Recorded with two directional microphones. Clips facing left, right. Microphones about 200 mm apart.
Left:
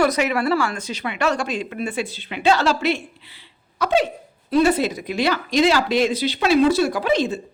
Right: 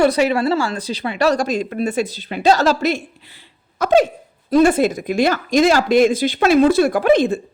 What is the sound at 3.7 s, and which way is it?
Hiccup, 45° right (ahead or behind).